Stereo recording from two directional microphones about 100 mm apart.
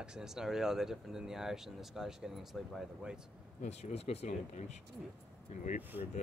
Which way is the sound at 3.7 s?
90° left.